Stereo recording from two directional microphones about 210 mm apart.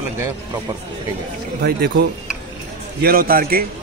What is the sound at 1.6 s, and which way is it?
Speech, 50° right (ahead or behind).